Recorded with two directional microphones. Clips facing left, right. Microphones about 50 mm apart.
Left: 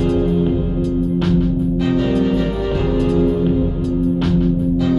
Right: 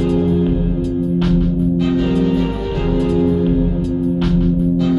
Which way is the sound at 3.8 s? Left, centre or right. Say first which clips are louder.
Even; centre.